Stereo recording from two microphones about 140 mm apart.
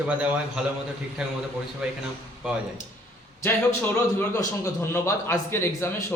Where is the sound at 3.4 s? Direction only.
15° left (ahead or behind).